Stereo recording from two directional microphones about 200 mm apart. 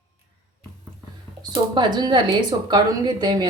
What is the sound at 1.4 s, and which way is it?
Speech, 20° right (ahead or behind).